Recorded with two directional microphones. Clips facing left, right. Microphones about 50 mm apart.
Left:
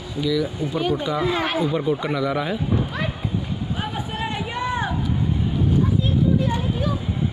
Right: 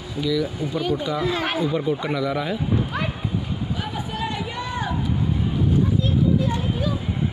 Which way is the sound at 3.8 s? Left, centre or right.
Left.